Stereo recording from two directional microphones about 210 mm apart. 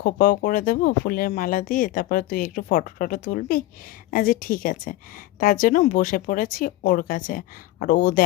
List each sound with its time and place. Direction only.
0.0 s a woman's voice: 40° left (ahead or behind)